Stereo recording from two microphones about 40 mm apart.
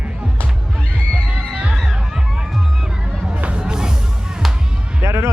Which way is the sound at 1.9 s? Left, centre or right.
Centre.